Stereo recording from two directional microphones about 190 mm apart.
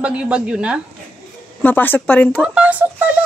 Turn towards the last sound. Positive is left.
turn(degrees=-10)  # may be behind; listen again after turning